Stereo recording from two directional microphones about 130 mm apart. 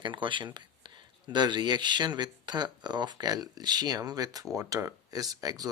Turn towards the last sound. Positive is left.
turn(degrees=-30)  # may be behind; listen again after turning